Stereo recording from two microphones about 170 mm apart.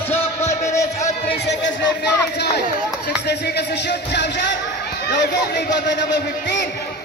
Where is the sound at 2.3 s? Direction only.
75° left (ahead or behind).